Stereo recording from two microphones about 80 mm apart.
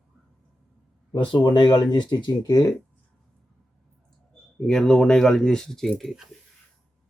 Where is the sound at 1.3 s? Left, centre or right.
Left.